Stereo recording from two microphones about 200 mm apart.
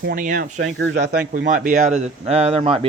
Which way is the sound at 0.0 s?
45° right (ahead or behind).